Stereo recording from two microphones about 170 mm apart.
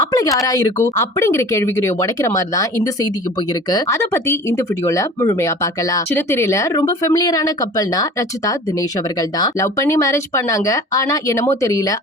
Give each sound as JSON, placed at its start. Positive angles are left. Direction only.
{"t": 0.0, "sound": "a sound", "side_deg": 20}
{"t": 0.4, "sound": "speech", "side_deg": 20}
{"t": 9.1, "sound": "speech", "side_deg": 20}